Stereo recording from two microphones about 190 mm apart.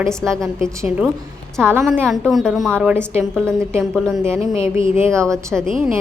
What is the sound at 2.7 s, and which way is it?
Speech, 10° right (ahead or behind).